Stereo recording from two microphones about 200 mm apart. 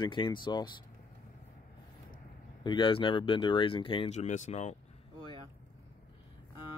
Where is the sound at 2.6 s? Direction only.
20° left (ahead or behind).